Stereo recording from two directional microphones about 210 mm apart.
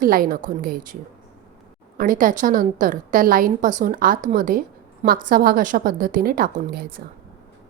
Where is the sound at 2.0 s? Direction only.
40° right (ahead or behind).